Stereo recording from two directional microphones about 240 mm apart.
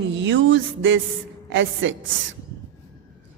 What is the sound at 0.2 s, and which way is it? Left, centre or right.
Music, right.